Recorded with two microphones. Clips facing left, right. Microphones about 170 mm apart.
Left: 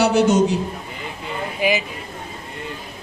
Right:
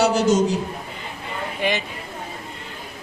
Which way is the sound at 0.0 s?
60° left (ahead or behind).